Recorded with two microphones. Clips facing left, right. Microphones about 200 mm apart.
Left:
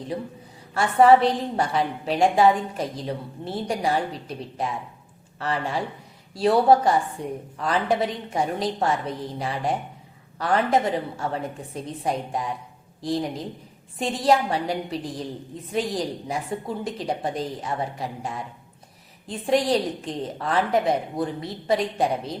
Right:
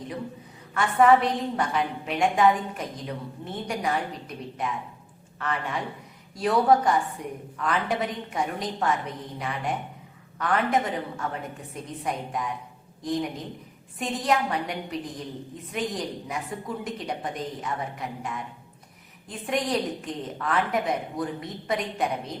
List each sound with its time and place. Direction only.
0.7 s a woman's voice: 35° left (ahead or behind)